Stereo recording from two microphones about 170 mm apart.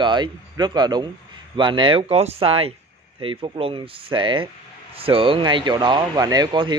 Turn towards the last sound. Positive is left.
turn(degrees=-25)  # may be behind; listen again after turning